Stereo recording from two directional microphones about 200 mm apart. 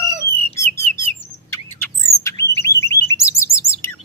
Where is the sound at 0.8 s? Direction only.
10° left (ahead or behind).